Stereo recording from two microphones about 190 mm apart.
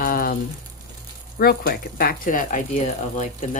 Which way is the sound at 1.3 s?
55° left (ahead or behind).